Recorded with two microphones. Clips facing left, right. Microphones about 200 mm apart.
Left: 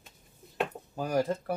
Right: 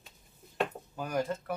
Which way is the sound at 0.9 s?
35° left (ahead or behind).